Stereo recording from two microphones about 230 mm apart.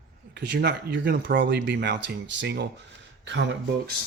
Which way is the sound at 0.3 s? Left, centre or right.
Right.